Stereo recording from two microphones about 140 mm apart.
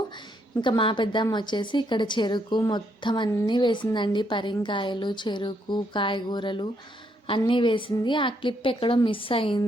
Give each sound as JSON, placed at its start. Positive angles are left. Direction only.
{"t": 0.6, "sound": "a woman's voice", "side_deg": 35}